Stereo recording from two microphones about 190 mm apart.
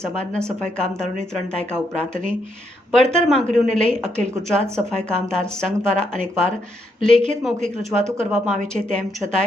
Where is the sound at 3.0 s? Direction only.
35° right (ahead or behind).